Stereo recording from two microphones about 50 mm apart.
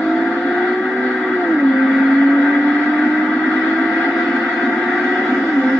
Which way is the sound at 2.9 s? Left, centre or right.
Centre.